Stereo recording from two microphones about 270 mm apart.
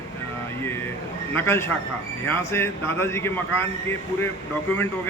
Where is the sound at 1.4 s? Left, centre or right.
Centre.